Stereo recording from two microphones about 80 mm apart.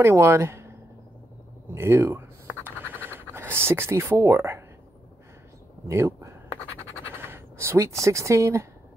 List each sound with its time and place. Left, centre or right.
0.0 s speech: right
1.7 s scratch: right
5.9 s speech: right